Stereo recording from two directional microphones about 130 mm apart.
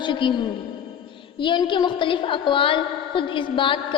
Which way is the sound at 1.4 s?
35° left (ahead or behind).